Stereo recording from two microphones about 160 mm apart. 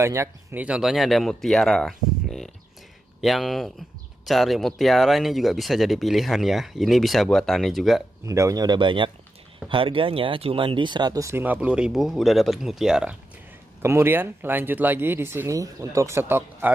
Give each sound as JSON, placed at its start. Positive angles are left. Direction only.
{"t": 0.0, "sound": "speech", "side_deg": -15}
{"t": 8.3, "sound": "speech", "side_deg": -20}
{"t": 13.8, "sound": "speech", "side_deg": -15}